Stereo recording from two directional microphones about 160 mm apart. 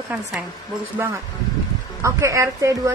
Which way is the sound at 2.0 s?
20° right (ahead or behind).